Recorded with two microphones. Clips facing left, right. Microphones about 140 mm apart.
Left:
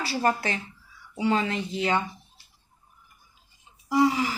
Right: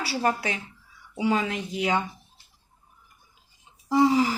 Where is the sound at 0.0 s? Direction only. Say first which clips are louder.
Even; 5° right (ahead or behind).